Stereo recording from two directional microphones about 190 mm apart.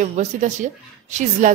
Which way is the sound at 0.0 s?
40° right (ahead or behind).